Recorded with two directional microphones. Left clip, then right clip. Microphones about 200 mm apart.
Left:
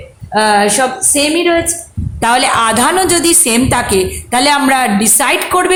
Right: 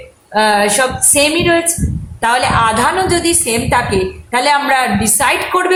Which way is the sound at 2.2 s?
35° left (ahead or behind).